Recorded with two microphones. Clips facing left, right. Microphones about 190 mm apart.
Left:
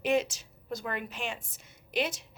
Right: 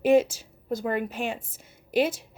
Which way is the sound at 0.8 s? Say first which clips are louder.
Right 8 dB; 40° right (ahead or behind).